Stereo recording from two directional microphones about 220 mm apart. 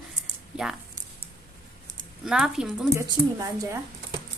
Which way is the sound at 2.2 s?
Centre (ahead or behind).